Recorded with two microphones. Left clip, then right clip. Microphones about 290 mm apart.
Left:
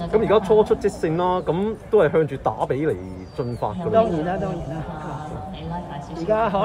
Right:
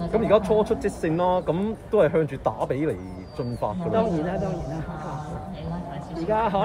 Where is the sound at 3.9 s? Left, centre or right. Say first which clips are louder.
Left 6 dB; centre.